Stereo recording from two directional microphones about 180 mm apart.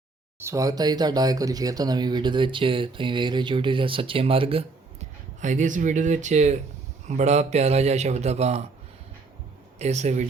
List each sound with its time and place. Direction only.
0.3 s speech: 15° right (ahead or behind)
5.4 s a man's voice: 45° right (ahead or behind)
9.7 s a man's voice: 40° right (ahead or behind)